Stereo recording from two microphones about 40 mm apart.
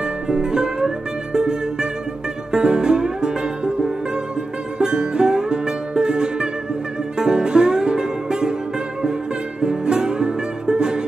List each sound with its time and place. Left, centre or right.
0.0 s music: centre
9.6 s music: centre